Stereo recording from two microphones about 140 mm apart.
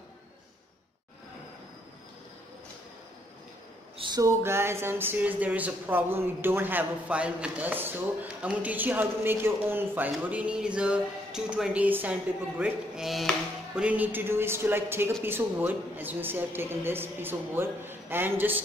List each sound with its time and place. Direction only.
4.0 s speech: 25° right (ahead or behind)